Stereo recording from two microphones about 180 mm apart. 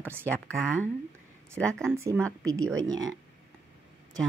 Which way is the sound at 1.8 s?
15° right (ahead or behind).